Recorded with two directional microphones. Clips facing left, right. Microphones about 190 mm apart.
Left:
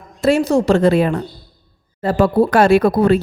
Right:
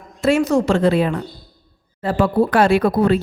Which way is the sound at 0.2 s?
35° left (ahead or behind).